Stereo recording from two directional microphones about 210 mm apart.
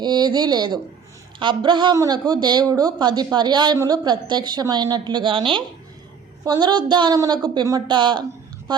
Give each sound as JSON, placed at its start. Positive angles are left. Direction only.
{"t": 0.0, "sound": "speech", "side_deg": -20}